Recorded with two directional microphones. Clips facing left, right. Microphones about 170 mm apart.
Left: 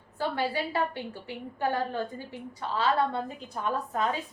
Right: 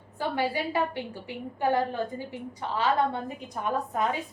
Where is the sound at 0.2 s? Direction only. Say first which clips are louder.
Right 1 dB; 15° right (ahead or behind).